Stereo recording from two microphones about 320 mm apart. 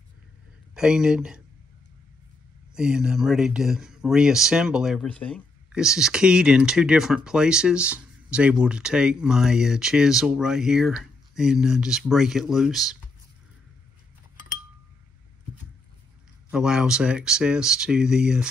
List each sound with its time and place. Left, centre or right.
0.7 s speech: centre
2.7 s speech: centre
16.4 s speech: centre